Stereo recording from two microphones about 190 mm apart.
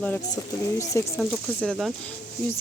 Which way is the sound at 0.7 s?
15° left (ahead or behind).